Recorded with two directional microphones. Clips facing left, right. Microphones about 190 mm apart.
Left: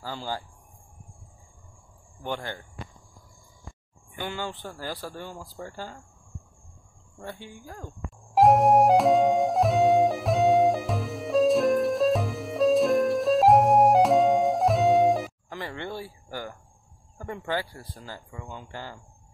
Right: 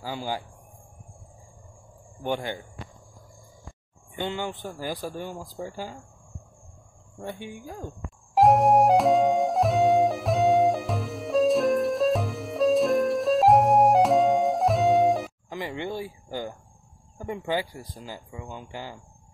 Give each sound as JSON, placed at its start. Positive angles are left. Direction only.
{"t": 0.0, "sound": "speech", "side_deg": -15}
{"t": 2.2, "sound": "speech", "side_deg": -15}
{"t": 4.1, "sound": "speech", "side_deg": -20}
{"t": 7.2, "sound": "speech", "side_deg": -15}
{"t": 8.4, "sound": "music", "side_deg": 0}
{"t": 15.5, "sound": "speech", "side_deg": -15}